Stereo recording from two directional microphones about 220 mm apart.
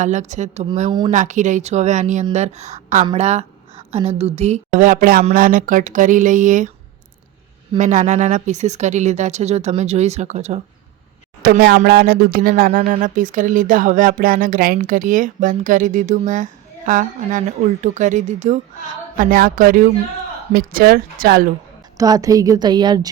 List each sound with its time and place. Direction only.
0.0 s speech: 35° right (ahead or behind)
1.1 s a woman's voice: 35° right (ahead or behind)
7.8 s speech: 35° right (ahead or behind)
11.4 s speech: 45° right (ahead or behind)
21.9 s speech: 15° right (ahead or behind)